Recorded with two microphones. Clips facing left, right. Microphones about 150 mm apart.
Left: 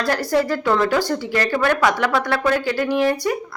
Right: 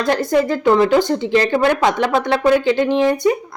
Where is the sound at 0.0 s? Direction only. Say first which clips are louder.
Right 3 dB; 20° right (ahead or behind).